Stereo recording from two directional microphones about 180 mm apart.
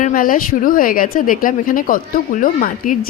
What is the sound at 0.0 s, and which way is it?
A woman's voice, 50° left (ahead or behind).